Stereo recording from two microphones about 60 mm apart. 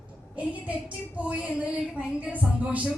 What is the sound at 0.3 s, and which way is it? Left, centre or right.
A woman's voice, right.